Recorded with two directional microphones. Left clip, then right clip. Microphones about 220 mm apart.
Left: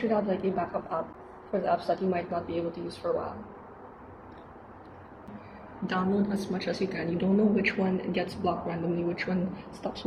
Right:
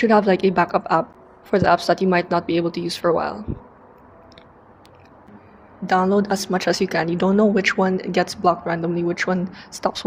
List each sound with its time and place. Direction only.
0.1 s a woman's voice: 50° right (ahead or behind)
5.8 s a woman's voice: 45° right (ahead or behind)